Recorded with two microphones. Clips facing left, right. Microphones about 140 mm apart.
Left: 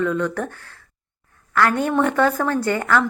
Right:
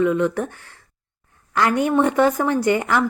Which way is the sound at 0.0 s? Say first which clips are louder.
Right 3 dB; 10° right (ahead or behind).